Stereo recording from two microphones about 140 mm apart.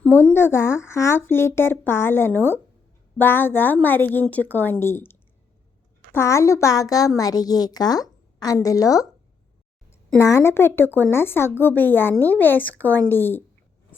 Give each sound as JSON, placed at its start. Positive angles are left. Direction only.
{"t": 0.0, "sound": "a woman's voice", "side_deg": 10}
{"t": 10.2, "sound": "speech", "side_deg": 20}